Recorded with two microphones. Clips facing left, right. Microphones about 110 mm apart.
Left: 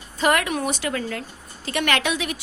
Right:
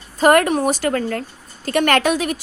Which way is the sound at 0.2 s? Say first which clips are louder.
Right 7 dB; 45° right (ahead or behind).